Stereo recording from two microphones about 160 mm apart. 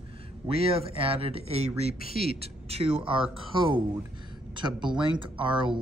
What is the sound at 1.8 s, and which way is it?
Speech, 65° left (ahead or behind).